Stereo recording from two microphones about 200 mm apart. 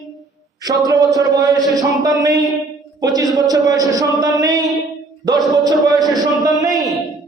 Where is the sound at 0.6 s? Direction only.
20° right (ahead or behind).